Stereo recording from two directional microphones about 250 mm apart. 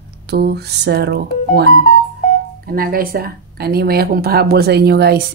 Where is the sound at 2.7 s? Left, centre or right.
Right.